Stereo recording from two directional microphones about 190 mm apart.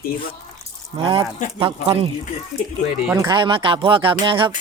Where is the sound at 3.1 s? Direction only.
20° right (ahead or behind).